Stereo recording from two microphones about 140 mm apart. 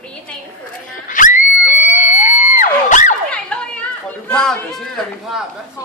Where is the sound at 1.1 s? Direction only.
70° left (ahead or behind).